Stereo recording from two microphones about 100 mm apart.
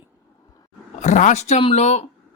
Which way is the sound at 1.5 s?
90° left.